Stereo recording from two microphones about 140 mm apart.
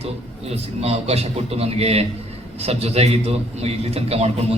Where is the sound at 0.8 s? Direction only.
45° right (ahead or behind).